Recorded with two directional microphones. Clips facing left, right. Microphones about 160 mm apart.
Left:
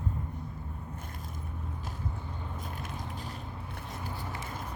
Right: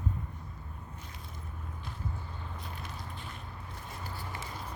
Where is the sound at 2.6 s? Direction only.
45° left (ahead or behind).